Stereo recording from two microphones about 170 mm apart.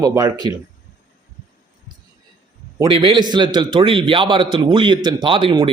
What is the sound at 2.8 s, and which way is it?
A man's voice, 30° right (ahead or behind).